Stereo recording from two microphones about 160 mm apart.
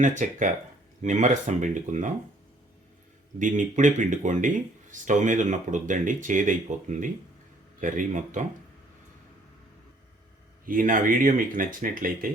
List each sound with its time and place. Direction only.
0.0 s speech: 50° right (ahead or behind)
3.3 s speech: 50° right (ahead or behind)
10.7 s speech: 55° right (ahead or behind)